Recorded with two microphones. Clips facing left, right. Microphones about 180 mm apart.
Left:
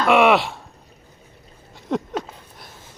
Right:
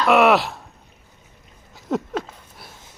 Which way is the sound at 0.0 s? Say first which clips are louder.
Even; centre (ahead or behind).